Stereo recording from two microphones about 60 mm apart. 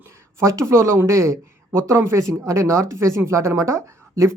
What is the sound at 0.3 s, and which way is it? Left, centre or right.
Speech, right.